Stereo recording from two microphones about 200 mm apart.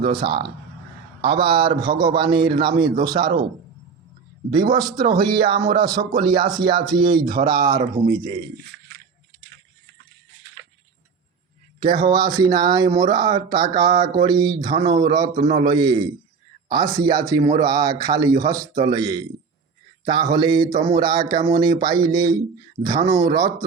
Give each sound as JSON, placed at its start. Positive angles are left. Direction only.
{"t": 0.0, "sound": "speech", "side_deg": -25}
{"t": 4.5, "sound": "speech", "side_deg": -20}
{"t": 11.8, "sound": "speech", "side_deg": -25}
{"t": 14.7, "sound": "a man's voice", "side_deg": -30}
{"t": 15.1, "sound": "speech", "side_deg": -20}
{"t": 15.4, "sound": "a man's voice", "side_deg": -35}
{"t": 15.6, "sound": "speech", "side_deg": -20}